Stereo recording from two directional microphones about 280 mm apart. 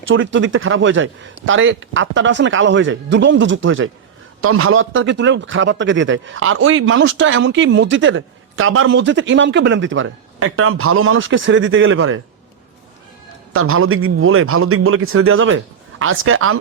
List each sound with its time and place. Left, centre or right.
0.1 s a man's voice: right
13.5 s a man's voice: right